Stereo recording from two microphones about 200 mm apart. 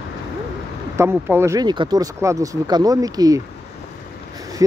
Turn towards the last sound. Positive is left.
turn(degrees=-20)  # may be behind; listen again after turning